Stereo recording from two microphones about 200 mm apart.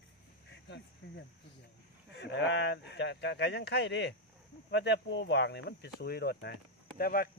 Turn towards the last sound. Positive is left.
turn(degrees=45)  # may be behind; listen again after turning